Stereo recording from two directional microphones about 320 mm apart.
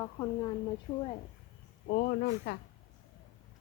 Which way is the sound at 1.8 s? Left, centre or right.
Left.